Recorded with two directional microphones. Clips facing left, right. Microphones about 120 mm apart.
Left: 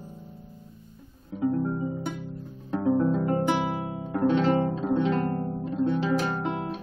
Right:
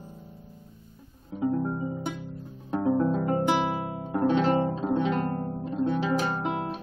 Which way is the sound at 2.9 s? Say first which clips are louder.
Left 2 dB; 10° right (ahead or behind).